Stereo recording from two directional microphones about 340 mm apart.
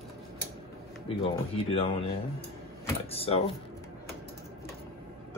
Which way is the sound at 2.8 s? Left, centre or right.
Centre.